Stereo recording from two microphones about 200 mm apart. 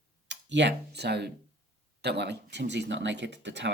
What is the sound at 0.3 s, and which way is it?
Speech, 60° right (ahead or behind).